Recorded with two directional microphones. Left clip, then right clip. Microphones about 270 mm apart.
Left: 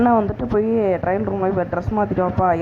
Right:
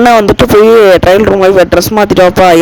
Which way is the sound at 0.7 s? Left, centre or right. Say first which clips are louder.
Right 16 dB; right.